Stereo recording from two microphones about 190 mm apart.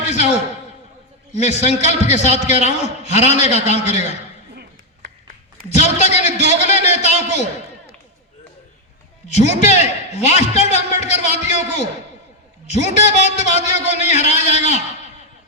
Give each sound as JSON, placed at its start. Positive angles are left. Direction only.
{"t": 1.3, "sound": "a man's voice", "side_deg": 35}
{"t": 5.7, "sound": "a sound", "side_deg": 35}
{"t": 9.2, "sound": "a man's voice", "side_deg": 35}